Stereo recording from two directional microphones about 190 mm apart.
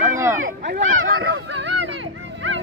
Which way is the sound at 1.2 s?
60° right (ahead or behind).